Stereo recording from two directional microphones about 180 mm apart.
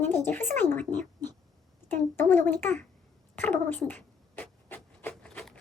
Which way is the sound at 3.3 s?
10° left (ahead or behind).